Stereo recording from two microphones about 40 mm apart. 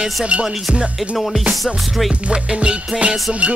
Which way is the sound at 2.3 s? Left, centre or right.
Right.